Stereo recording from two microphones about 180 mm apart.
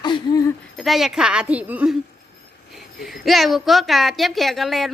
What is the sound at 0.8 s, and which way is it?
A woman's voice, centre (ahead or behind).